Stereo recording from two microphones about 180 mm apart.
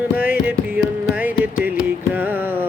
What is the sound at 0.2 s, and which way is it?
Music, 10° right (ahead or behind).